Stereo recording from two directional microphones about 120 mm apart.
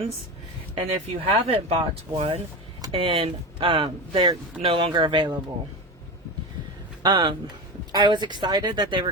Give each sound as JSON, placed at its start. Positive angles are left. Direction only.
{"t": 0.8, "sound": "speech", "side_deg": -50}
{"t": 7.0, "sound": "speech", "side_deg": -40}